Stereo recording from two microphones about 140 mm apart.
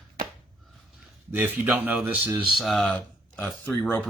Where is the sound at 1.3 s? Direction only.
15° right (ahead or behind); by 3.8 s 5° left (ahead or behind).